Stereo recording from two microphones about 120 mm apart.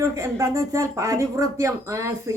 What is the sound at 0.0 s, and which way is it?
Speech, 25° right (ahead or behind).